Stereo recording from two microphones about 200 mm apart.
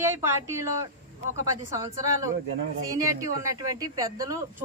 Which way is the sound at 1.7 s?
15° right (ahead or behind).